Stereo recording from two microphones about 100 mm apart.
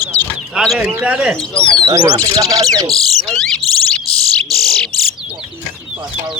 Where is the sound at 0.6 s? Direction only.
5° right (ahead or behind).